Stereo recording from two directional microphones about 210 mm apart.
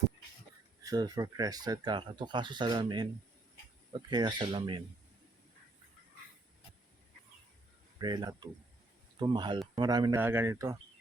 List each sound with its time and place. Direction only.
0.9 s speech: 15° right (ahead or behind)
4.1 s speech: 20° right (ahead or behind)
7.9 s speech: 15° right (ahead or behind)